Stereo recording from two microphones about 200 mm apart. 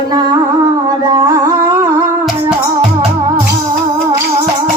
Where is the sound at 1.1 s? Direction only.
20° right (ahead or behind).